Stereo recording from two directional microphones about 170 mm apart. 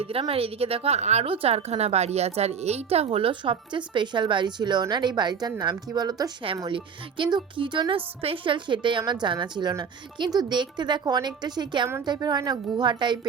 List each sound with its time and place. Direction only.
0.0 s a woman's voice: 35° right (ahead or behind)